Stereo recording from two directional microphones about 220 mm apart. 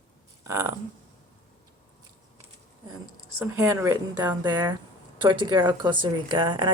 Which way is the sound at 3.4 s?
10° right (ahead or behind).